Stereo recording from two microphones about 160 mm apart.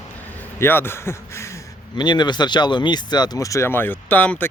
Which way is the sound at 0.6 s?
15° left (ahead or behind).